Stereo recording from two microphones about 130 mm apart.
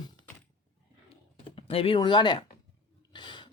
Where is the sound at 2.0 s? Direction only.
35° left (ahead or behind).